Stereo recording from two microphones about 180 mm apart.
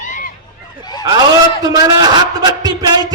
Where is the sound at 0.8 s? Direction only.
20° left (ahead or behind).